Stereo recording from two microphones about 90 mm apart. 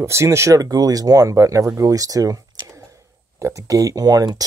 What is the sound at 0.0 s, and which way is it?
Speech, 30° right (ahead or behind).